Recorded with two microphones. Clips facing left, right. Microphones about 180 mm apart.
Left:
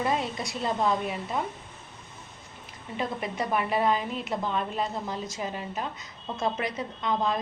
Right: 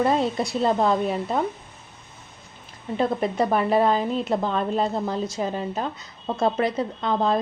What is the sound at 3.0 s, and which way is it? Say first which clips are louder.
A woman's voice: right 8 dB; 30° right (ahead or behind).